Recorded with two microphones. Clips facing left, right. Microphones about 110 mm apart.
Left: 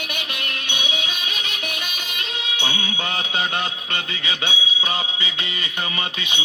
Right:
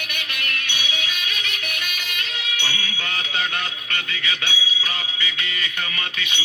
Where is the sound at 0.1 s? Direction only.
20° left (ahead or behind).